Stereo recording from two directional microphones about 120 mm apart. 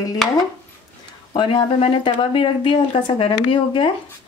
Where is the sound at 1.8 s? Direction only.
50° left (ahead or behind).